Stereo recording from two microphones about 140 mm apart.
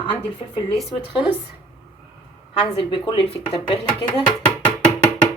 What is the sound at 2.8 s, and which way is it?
Speech, 40° left (ahead or behind).